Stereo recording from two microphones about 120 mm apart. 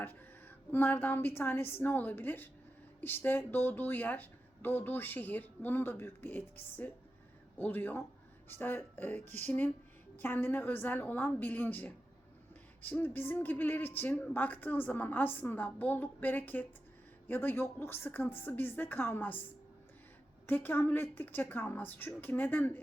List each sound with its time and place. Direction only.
0.0 s speech: 15° left (ahead or behind)
20.5 s speech: 15° left (ahead or behind)